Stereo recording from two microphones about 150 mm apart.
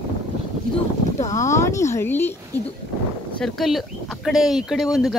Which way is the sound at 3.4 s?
Centre (ahead or behind).